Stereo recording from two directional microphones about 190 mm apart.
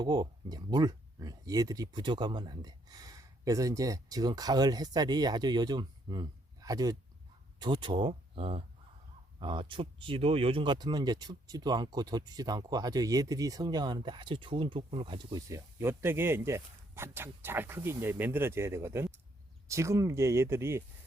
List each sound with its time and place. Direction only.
0.0 s speech: 20° right (ahead or behind)